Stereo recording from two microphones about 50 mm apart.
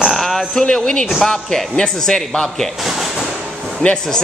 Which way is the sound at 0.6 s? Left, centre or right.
Centre.